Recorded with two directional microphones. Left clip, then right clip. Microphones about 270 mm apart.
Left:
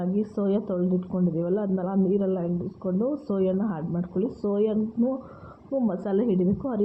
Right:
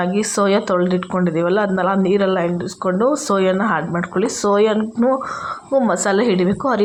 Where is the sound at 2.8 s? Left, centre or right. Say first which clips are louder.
Right 12 dB; right.